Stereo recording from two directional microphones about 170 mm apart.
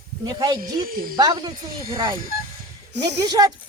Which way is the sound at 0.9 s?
55° right (ahead or behind).